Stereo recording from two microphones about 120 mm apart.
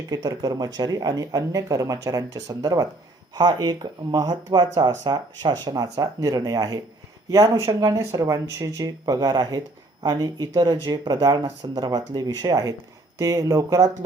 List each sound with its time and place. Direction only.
0.1 s speech: 30° right (ahead or behind)